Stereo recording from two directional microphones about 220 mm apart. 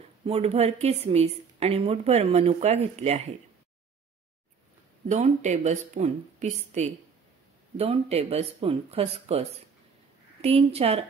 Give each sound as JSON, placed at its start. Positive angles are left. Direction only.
{"t": 0.2, "sound": "a woman's voice", "side_deg": -25}
{"t": 5.0, "sound": "a woman's voice", "side_deg": -30}